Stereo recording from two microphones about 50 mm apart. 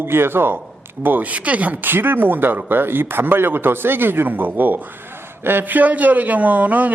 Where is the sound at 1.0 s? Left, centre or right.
Right.